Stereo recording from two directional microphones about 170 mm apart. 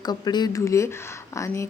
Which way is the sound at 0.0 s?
25° left (ahead or behind).